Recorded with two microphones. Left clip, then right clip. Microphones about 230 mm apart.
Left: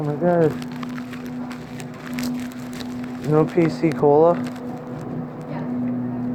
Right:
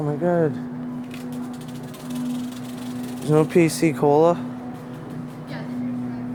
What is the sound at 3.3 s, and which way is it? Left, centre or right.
Speech, right.